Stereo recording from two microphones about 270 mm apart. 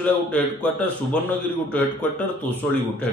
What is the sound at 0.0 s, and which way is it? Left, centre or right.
Speech, centre.